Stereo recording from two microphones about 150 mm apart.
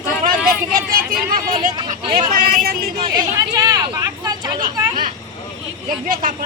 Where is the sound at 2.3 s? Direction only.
70° right (ahead or behind).